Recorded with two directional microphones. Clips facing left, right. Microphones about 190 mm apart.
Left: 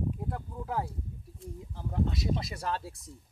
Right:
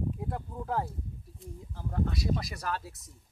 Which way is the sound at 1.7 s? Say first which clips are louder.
Left 1 dB; 20° left (ahead or behind).